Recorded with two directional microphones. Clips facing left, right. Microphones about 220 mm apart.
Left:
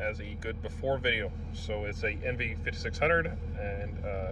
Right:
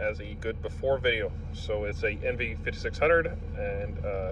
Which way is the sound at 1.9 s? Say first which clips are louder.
Right 4 dB; 15° left (ahead or behind).